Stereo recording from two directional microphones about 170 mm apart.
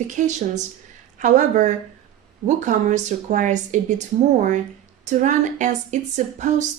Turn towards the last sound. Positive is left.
turn(degrees=-45)  # may be behind; listen again after turning